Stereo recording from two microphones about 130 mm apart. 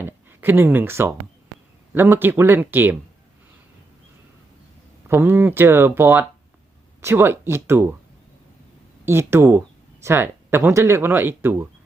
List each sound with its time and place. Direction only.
0.0 s speech: 15° right (ahead or behind)
5.0 s speech: 15° right (ahead or behind)
9.0 s speech: 20° right (ahead or behind)